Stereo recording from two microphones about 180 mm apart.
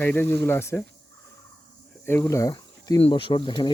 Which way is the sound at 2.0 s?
10° left (ahead or behind).